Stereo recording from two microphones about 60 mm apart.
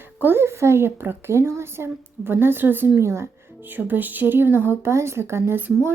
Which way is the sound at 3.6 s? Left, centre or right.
Right.